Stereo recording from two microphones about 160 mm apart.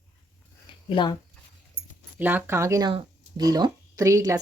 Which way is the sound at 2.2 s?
10° right (ahead or behind).